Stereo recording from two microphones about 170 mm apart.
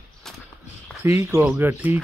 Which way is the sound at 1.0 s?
15° right (ahead or behind).